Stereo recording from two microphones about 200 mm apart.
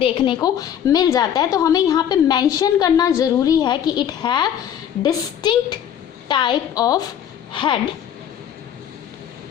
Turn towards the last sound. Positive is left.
turn(degrees=25)  # may be behind; listen again after turning